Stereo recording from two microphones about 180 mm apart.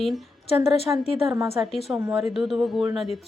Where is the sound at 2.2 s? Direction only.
Centre (ahead or behind).